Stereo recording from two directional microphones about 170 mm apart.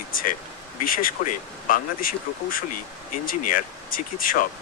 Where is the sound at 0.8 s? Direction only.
55° left (ahead or behind).